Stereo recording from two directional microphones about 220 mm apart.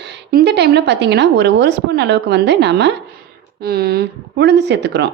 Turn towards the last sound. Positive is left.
turn(degrees=-50)  # may be behind; listen again after turning